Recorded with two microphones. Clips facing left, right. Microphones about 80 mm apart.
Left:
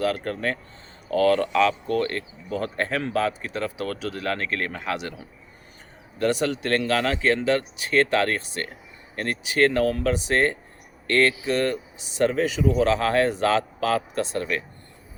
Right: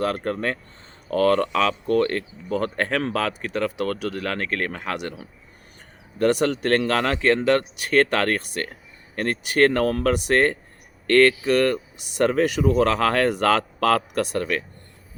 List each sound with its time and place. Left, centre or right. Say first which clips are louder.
0.0 s speech: right 1 dB; right
6.1 s speech: right 3 dB; right